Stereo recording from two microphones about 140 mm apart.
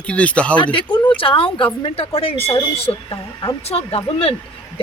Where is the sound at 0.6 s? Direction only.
35° left (ahead or behind).